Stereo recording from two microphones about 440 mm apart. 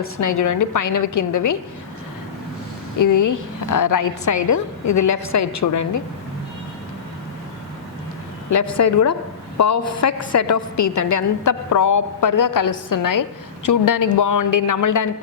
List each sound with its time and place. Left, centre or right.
0.2 s a man's voice: left
3.0 s a woman's voice: left
8.4 s a woman's voice: left